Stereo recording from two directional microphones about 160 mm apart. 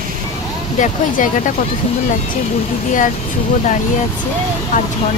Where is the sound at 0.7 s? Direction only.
50° left (ahead or behind).